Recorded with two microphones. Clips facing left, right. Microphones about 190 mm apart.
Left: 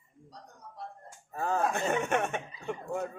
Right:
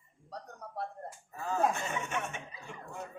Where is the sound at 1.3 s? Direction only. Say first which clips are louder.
Left 2 dB; 60° left (ahead or behind).